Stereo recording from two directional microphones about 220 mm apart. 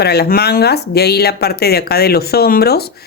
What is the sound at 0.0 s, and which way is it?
Speech, 45° left (ahead or behind).